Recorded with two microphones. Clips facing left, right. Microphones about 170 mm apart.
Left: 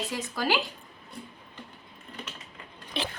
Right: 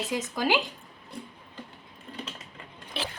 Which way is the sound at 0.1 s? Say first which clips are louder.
Right 3 dB; 15° right (ahead or behind).